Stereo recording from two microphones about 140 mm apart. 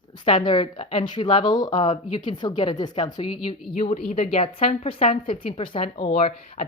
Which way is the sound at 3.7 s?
50° left (ahead or behind).